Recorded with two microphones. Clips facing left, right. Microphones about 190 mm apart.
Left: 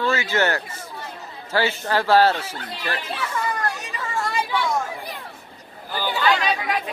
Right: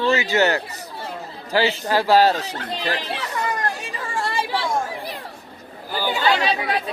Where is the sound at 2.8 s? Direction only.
35° right (ahead or behind).